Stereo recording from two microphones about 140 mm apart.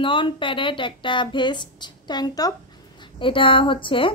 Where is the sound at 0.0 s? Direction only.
35° left (ahead or behind).